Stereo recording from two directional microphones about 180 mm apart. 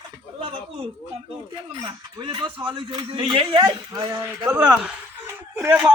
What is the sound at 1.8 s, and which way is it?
A man's voice, 25° right (ahead or behind).